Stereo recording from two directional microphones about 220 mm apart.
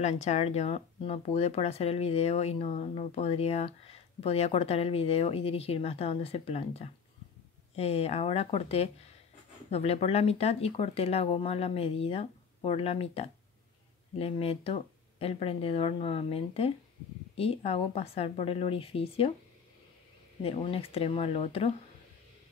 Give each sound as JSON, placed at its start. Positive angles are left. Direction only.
{"t": 0.0, "sound": "speech", "side_deg": 30}
{"t": 20.4, "sound": "speech", "side_deg": 25}